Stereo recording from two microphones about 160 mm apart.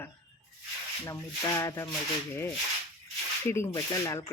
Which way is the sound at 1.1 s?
20° left (ahead or behind).